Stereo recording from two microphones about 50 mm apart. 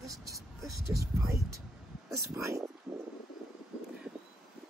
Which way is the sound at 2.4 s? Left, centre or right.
Right.